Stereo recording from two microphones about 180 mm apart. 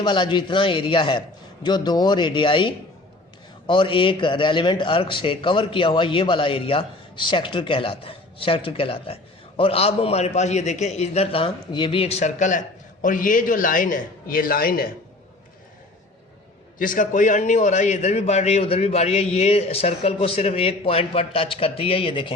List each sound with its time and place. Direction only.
0.0 s a man's voice: 25° left (ahead or behind); by 14.8 s 55° left (ahead or behind)
16.7 s a man's voice: 50° left (ahead or behind); by 22.3 s 30° left (ahead or behind)